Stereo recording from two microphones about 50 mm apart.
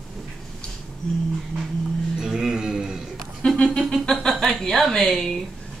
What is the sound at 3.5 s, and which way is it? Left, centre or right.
Music, centre.